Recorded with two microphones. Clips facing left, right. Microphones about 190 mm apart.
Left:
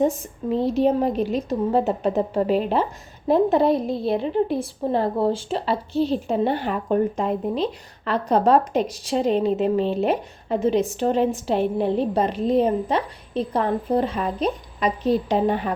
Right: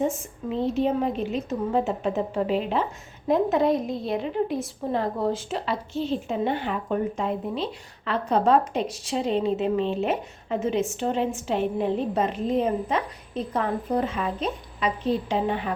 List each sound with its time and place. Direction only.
0.6 s a woman's voice: 40° left (ahead or behind)